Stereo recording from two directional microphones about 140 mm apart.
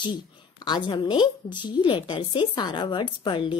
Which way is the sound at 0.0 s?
30° left (ahead or behind).